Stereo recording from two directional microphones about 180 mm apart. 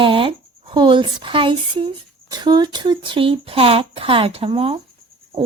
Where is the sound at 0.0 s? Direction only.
30° right (ahead or behind).